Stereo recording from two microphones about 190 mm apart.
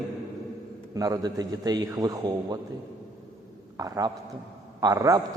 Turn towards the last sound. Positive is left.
turn(degrees=-15)  # may be behind; listen again after turning